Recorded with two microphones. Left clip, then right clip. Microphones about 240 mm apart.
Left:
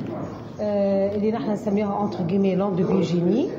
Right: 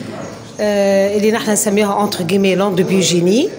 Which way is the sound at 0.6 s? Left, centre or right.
Right.